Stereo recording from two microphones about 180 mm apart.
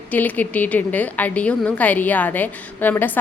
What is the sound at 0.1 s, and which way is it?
A woman's voice, 10° left (ahead or behind).